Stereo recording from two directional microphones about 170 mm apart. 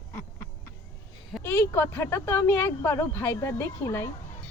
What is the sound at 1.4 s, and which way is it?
A child's voice, 15° left (ahead or behind).